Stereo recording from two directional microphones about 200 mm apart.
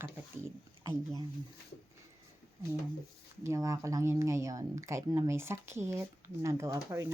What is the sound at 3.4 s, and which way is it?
Speech, 15° right (ahead or behind).